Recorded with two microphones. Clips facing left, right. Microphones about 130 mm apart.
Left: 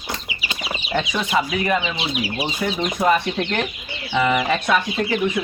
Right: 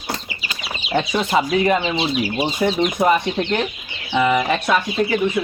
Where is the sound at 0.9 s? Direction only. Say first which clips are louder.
Right 3 dB; 25° right (ahead or behind).